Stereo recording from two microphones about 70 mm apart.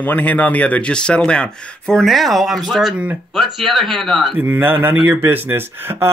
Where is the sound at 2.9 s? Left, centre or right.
Centre.